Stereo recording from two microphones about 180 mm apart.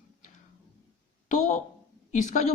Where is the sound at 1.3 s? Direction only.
40° left (ahead or behind).